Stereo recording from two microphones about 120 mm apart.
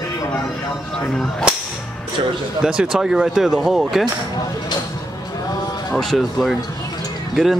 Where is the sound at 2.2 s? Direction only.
50° right (ahead or behind).